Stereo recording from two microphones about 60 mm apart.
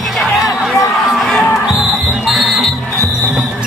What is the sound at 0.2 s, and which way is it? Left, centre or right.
Music, centre.